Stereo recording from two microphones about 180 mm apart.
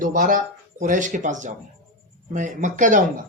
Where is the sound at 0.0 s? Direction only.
45° right (ahead or behind).